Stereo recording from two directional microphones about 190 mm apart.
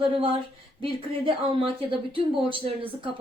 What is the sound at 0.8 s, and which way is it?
Speech, 25° right (ahead or behind).